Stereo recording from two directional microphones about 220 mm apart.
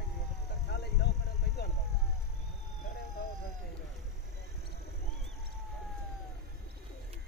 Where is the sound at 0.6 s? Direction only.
50° left (ahead or behind).